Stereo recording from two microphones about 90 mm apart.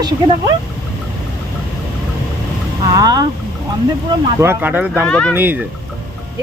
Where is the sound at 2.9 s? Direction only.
45° right (ahead or behind).